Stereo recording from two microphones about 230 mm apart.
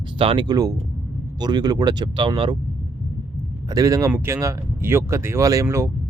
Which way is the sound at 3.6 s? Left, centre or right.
Centre.